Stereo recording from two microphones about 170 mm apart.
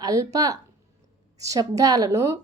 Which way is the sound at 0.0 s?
20° right (ahead or behind).